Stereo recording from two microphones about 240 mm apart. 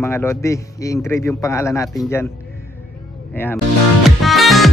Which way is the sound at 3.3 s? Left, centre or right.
Centre.